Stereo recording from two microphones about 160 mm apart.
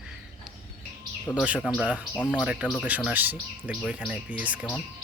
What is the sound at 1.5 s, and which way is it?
Speech, 5° left (ahead or behind).